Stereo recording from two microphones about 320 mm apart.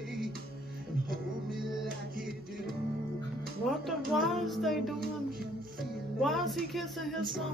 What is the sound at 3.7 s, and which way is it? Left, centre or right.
Child singing, centre.